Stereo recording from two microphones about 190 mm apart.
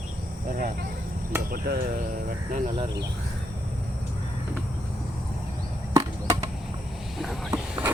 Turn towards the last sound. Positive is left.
turn(degrees=-5)  # may be behind; listen again after turning